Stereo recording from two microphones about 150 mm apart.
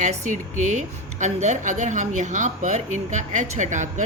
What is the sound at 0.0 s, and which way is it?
Speech, 55° right (ahead or behind).